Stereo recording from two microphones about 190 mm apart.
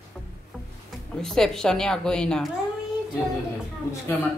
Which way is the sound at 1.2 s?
5° left (ahead or behind).